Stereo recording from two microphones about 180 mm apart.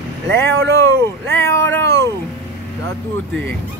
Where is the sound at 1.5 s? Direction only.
15° left (ahead or behind).